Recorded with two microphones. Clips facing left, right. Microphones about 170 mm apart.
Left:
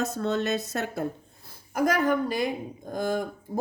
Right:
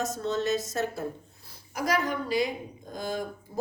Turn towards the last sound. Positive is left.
turn(degrees=50)  # may be behind; listen again after turning